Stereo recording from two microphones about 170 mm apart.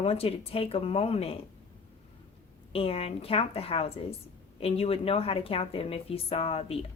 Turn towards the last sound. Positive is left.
turn(degrees=35)  # may be behind; listen again after turning